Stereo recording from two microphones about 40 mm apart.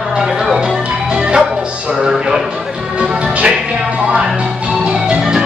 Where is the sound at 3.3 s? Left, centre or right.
Right.